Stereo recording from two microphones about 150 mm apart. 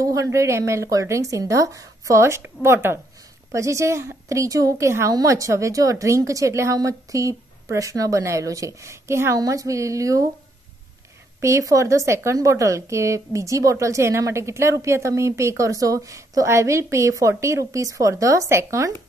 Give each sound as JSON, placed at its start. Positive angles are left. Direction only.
{"t": 0.0, "sound": "a woman's voice", "side_deg": -20}
{"t": 11.4, "sound": "a woman's voice", "side_deg": -20}